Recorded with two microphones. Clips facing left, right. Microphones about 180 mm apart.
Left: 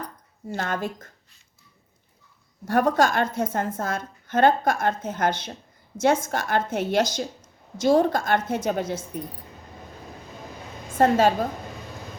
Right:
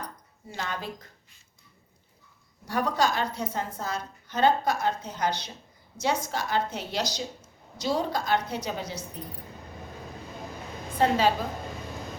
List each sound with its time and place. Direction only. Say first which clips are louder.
0.5 s a woman's voice: left 6 dB; 50° left (ahead or behind)
2.6 s a woman's voice: left 6 dB; 50° left (ahead or behind)
10.9 s a woman's voice: left 5 dB; 45° left (ahead or behind)